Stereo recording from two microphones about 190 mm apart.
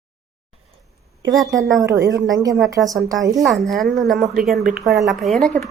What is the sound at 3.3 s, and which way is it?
A woman's voice, centre (ahead or behind).